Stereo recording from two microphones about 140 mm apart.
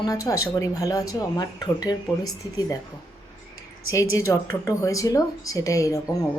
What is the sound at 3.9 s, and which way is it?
A woman's voice, 20° left (ahead or behind).